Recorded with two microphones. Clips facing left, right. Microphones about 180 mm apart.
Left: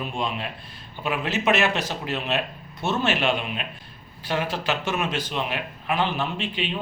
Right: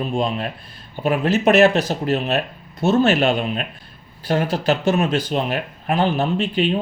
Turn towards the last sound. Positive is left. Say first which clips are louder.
# right 9 dB
turn(degrees=-40)  # may be behind; listen again after turning